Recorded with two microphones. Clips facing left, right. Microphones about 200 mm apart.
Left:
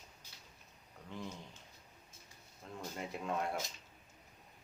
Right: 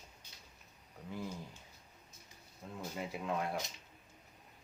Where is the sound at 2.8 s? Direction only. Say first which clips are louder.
Right 1 dB; 5° right (ahead or behind).